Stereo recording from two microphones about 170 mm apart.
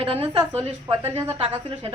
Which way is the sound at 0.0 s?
35° right (ahead or behind).